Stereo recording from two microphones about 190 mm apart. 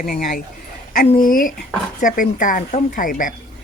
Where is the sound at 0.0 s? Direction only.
50° left (ahead or behind).